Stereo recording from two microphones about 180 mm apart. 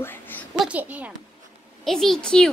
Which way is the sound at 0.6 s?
10° right (ahead or behind).